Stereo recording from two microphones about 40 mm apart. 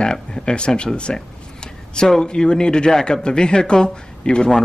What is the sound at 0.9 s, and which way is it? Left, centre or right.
Speech, left.